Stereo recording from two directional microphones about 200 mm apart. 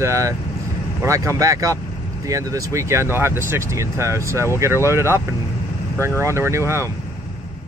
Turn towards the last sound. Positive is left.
turn(degrees=-15)  # may be behind; listen again after turning